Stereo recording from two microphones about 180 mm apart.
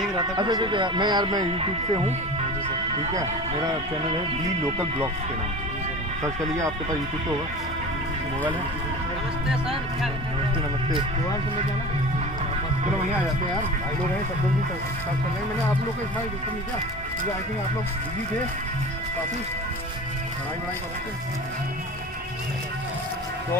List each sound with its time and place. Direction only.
0.4 s speech: 25° right (ahead or behind)